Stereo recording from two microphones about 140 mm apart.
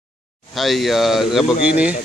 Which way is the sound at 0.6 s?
Centre (ahead or behind).